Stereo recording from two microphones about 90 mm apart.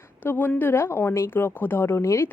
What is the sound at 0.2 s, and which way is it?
A woman's voice, 20° left (ahead or behind).